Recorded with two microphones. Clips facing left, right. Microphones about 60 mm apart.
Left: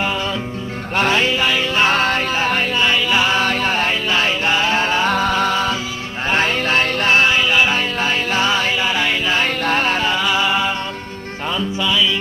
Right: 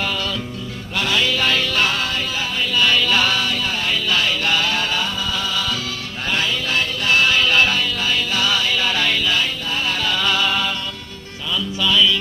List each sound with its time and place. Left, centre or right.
0.9 s music: left
1.4 s music: centre
1.9 s music: left
2.7 s music: left
3.3 s music: left
5.0 s music: left; by 7.7 s centre
7.7 s music: left
8.8 s music: left
9.5 s music: left
10.2 s music: centre